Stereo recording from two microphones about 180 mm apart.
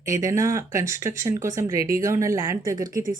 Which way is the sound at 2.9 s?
50° right (ahead or behind).